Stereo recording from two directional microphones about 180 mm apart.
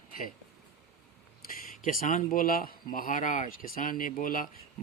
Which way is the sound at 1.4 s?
50° left (ahead or behind).